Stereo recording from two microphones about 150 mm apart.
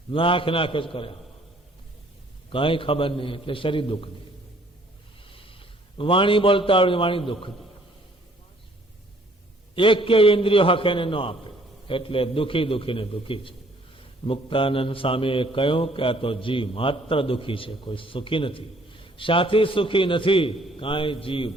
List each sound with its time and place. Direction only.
0.1 s a man's voice: 35° left (ahead or behind)
2.5 s a man's voice: 35° left (ahead or behind)
5.3 s a man's voice: 35° left (ahead or behind)
9.7 s a man's voice: 35° left (ahead or behind)